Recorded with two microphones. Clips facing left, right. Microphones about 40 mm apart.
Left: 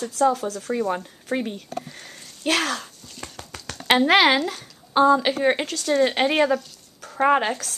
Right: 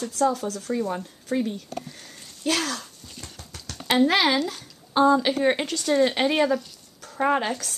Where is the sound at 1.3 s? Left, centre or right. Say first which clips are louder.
Even; left.